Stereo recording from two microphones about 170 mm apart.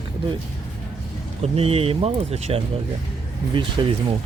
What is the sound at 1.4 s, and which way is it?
Speech, 35° right (ahead or behind).